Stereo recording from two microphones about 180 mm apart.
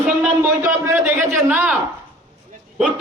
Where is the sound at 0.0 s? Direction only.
10° right (ahead or behind).